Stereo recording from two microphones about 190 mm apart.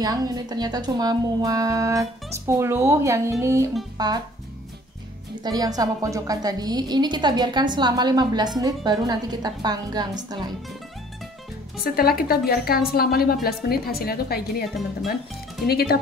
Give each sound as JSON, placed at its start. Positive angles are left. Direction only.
{"t": 0.0, "sound": "a woman's voice", "side_deg": -20}
{"t": 5.4, "sound": "a woman's voice", "side_deg": -20}
{"t": 11.8, "sound": "a woman's voice", "side_deg": 50}
{"t": 15.6, "sound": "speech", "side_deg": 55}